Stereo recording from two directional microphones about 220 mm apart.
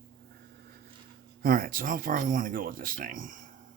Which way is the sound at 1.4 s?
40° right (ahead or behind).